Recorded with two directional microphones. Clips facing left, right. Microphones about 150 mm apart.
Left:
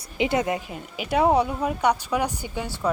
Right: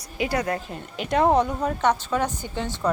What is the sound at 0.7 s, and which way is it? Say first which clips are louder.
Speech: even; 5° left (ahead or behind).